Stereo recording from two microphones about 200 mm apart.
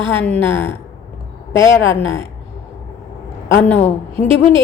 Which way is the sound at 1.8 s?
75° left (ahead or behind).